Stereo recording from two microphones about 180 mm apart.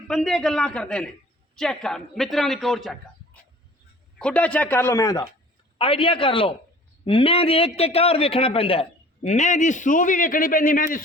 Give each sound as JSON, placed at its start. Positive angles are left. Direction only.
{"t": 0.1, "sound": "a man's voice", "side_deg": 0}
{"t": 4.2, "sound": "a man's voice", "side_deg": 5}
{"t": 5.7, "sound": "a man's voice", "side_deg": 30}